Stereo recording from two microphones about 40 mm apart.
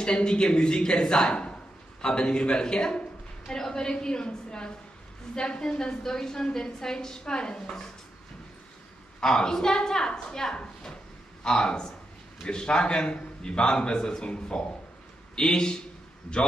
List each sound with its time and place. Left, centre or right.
0.0 s a man's voice: left
9.2 s a woman's voice: centre